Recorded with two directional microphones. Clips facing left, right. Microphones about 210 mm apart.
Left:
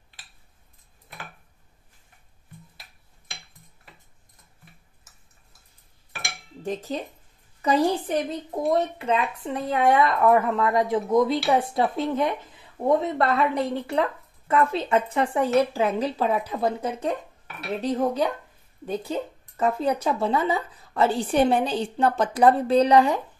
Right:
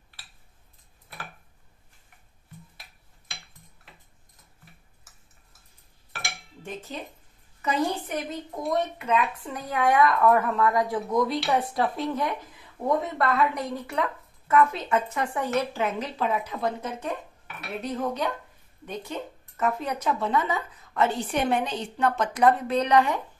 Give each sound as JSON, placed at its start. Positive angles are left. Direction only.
{"t": 6.6, "sound": "speech", "side_deg": 35}